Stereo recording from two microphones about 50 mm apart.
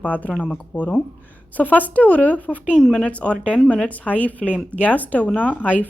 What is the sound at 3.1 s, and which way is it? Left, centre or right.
Speech, left.